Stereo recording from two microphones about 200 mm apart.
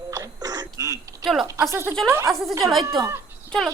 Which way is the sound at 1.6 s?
15° right (ahead or behind).